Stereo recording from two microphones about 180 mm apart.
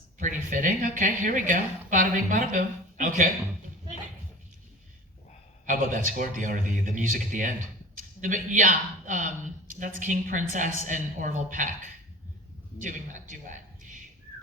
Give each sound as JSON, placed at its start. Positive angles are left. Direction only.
{"t": 0.2, "sound": "a woman's voice", "side_deg": -45}
{"t": 5.6, "sound": "a woman's voice", "side_deg": -45}
{"t": 12.8, "sound": "a woman's voice", "side_deg": -45}